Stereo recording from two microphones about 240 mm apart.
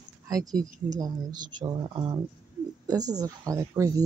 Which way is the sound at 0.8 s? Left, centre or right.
Centre.